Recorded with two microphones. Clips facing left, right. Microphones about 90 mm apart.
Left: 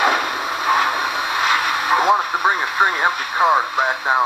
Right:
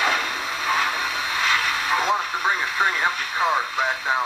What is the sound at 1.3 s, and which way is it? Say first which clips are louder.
Radio: left 4 dB; 15° left (ahead or behind).